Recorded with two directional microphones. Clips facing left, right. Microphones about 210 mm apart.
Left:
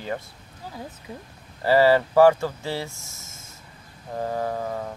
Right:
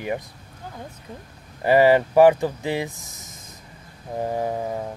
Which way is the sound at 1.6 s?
20° right (ahead or behind).